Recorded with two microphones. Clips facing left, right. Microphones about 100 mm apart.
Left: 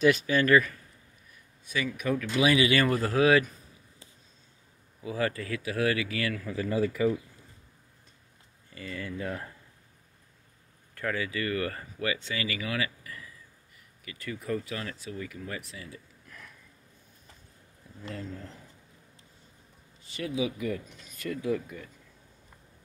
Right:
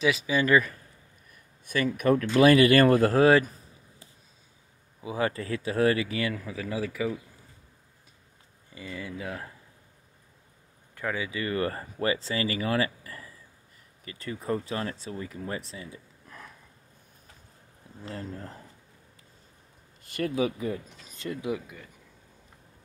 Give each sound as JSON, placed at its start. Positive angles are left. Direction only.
{"t": 0.0, "sound": "speech", "side_deg": 0}
{"t": 0.4, "sound": "speech", "side_deg": -20}
{"t": 2.0, "sound": "speech", "side_deg": -50}
{"t": 3.2, "sound": "speech", "side_deg": -35}
{"t": 5.0, "sound": "speech", "side_deg": -25}
{"t": 6.4, "sound": "speech", "side_deg": 0}
{"t": 8.7, "sound": "speech", "side_deg": -15}
{"t": 11.0, "sound": "speech", "side_deg": -15}
{"t": 18.0, "sound": "speech", "side_deg": -40}
{"t": 20.0, "sound": "speech", "side_deg": -55}
{"t": 20.5, "sound": "speech", "side_deg": -30}
{"t": 21.5, "sound": "speech", "side_deg": -5}